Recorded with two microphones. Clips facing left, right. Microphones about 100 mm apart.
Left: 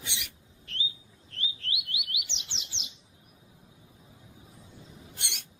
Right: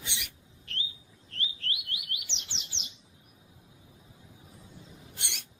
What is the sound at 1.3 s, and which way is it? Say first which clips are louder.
Bird: even; centre (ahead or behind).